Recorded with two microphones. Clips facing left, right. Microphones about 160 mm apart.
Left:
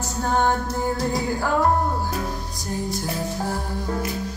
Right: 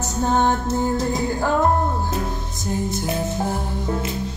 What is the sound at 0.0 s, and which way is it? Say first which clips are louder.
Music: right 2 dB; 20° right (ahead or behind).